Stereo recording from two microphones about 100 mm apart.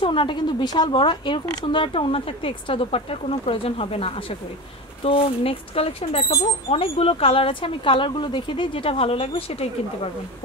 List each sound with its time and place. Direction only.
0.0 s speech: 60° left (ahead or behind); by 9.7 s 90° left